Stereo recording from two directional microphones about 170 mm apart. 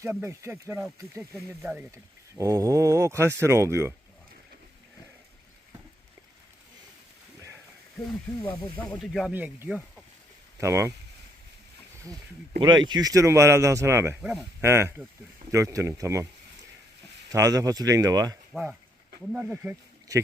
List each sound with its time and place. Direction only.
0.0 s speech: 15° right (ahead or behind)
8.4 s speech: 5° left (ahead or behind)
9.3 s speech: 10° right (ahead or behind)
12.5 s speech: 25° right (ahead or behind)
17.2 s speech: 20° right (ahead or behind)
18.5 s speech: 5° right (ahead or behind)